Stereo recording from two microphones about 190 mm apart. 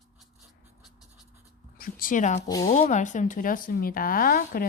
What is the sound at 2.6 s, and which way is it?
Speech, 40° left (ahead or behind).